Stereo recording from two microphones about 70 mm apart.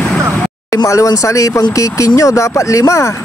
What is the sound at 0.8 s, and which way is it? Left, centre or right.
Speech, left.